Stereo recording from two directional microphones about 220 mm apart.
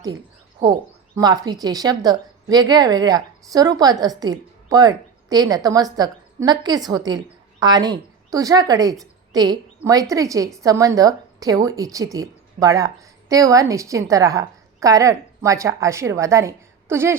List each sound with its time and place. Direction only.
0.6 s a woman's voice: 20° right (ahead or behind)